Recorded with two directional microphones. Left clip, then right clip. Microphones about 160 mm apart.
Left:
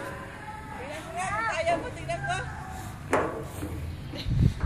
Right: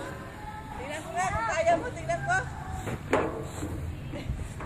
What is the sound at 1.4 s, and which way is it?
Hubbub, 40° right (ahead or behind).